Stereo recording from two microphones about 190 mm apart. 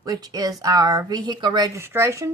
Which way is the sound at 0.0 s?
20° right (ahead or behind).